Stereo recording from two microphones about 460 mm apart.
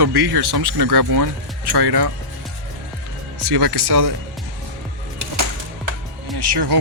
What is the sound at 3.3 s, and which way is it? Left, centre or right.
Speech, right.